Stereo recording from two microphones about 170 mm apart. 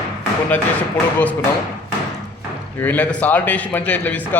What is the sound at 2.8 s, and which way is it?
A man's voice, 10° left (ahead or behind).